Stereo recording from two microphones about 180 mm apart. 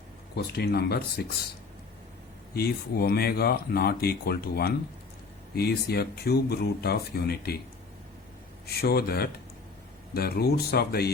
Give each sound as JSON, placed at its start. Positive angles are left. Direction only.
{"t": 0.3, "sound": "speech", "side_deg": 65}
{"t": 2.6, "sound": "speech", "side_deg": 60}
{"t": 8.6, "sound": "speech", "side_deg": 60}